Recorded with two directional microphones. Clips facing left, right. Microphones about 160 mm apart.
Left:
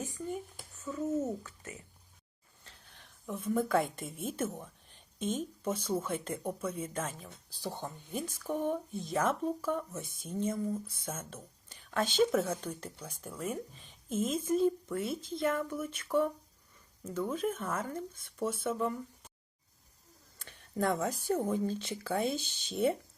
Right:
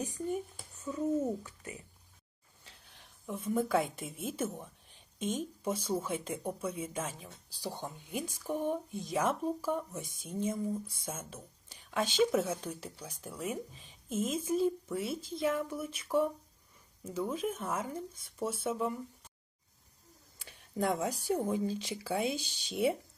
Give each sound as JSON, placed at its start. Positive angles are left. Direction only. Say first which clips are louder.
{"t": 0.8, "sound": "speech", "louder": "right 1 dB", "side_deg": -15}
{"t": 2.6, "sound": "a woman's voice", "louder": "left 1 dB", "side_deg": 0}
{"t": 20.4, "sound": "a sound", "louder": "left 1 dB", "side_deg": -10}
{"t": 21.2, "sound": "speech", "louder": "left 1 dB", "side_deg": -10}